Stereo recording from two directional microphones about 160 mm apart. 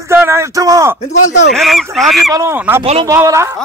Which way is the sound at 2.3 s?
20° right (ahead or behind).